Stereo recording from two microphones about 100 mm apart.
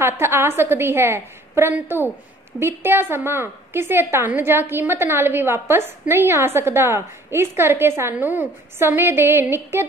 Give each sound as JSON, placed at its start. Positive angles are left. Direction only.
{"t": 0.0, "sound": "a woman's voice", "side_deg": -25}